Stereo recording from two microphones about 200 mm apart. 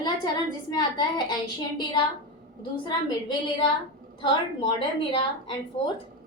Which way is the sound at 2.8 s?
25° left (ahead or behind).